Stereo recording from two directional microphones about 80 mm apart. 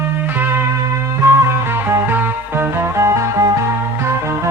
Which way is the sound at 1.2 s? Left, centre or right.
Right.